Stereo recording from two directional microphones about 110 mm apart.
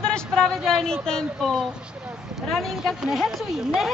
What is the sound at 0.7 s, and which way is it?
Speech, 5° left (ahead or behind).